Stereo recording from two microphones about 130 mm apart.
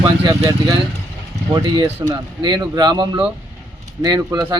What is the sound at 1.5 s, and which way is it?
Speech, 30° right (ahead or behind).